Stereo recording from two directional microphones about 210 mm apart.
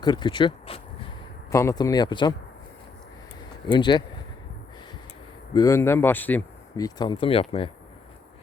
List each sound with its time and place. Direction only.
0.0 s speech: 20° left (ahead or behind)
3.7 s speech: 20° left (ahead or behind)
5.5 s speech: 15° left (ahead or behind)